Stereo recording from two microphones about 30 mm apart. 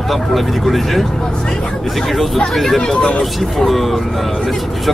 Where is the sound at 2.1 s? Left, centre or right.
Centre.